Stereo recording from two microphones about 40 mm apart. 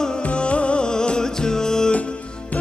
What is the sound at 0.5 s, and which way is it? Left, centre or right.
Music, left.